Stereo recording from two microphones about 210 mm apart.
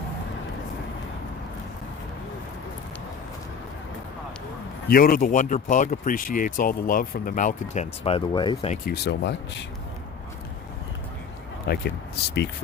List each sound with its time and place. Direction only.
4.9 s speech: 45° left (ahead or behind); by 8.7 s 20° left (ahead or behind)
8.9 s speech: 50° left (ahead or behind)
11.7 s speech: 50° left (ahead or behind)